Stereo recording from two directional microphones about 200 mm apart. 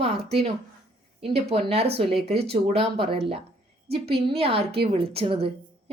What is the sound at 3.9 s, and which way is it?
A woman's voice, 30° right (ahead or behind).